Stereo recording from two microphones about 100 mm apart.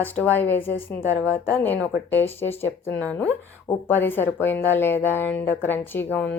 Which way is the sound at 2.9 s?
10° left (ahead or behind).